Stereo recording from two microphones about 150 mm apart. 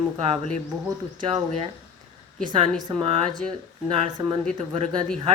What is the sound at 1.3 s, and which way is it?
Speech, 45° right (ahead or behind).